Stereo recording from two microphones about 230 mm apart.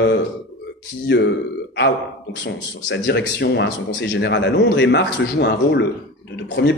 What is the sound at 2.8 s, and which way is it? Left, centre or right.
A man's voice, left.